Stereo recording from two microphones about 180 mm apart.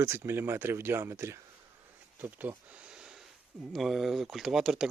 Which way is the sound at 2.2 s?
10° right (ahead or behind).